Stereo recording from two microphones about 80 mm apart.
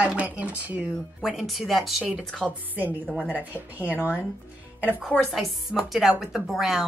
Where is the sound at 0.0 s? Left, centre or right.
Centre.